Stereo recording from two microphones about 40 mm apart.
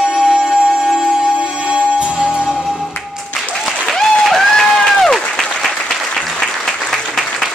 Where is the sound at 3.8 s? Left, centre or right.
Centre.